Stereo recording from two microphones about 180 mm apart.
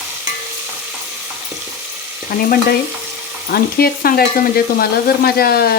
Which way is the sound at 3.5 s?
55° left (ahead or behind).